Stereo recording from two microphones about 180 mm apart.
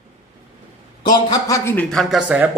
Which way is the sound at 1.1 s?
20° left (ahead or behind).